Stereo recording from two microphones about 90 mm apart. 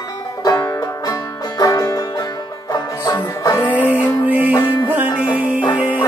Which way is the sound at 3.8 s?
15° right (ahead or behind).